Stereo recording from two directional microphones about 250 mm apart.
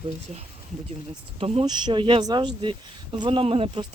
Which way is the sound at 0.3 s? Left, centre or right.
Right.